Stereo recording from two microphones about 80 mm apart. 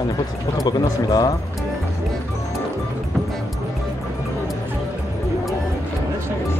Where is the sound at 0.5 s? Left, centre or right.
Left.